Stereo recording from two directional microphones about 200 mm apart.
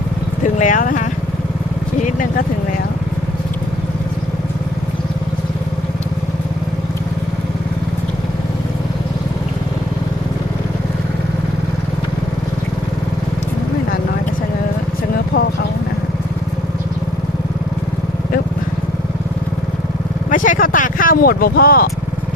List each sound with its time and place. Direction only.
0.4 s speech: 40° left (ahead or behind)
20.3 s vehicle: 40° left (ahead or behind)